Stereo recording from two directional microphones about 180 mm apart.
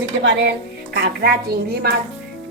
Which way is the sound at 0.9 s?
60° right (ahead or behind).